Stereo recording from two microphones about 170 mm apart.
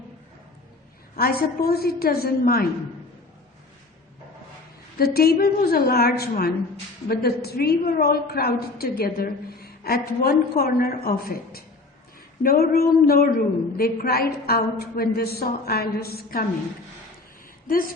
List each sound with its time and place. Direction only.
1.1 s a woman's voice: 60° left (ahead or behind)
4.9 s a woman's voice: 65° left (ahead or behind)